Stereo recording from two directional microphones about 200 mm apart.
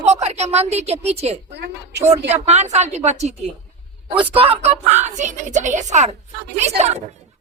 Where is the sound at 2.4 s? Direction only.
35° right (ahead or behind).